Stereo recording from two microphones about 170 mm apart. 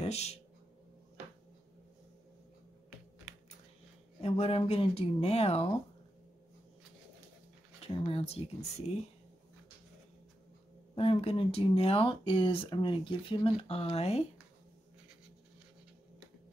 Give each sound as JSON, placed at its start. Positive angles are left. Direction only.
{"t": 0.0, "sound": "speech", "side_deg": 40}
{"t": 4.2, "sound": "speech", "side_deg": 35}
{"t": 7.8, "sound": "speech", "side_deg": 35}
{"t": 11.0, "sound": "speech", "side_deg": 35}